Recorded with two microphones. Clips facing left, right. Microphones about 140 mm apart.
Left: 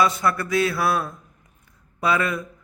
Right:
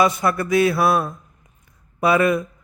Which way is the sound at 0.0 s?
20° right (ahead or behind).